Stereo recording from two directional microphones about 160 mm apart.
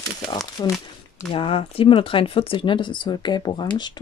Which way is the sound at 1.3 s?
35° left (ahead or behind).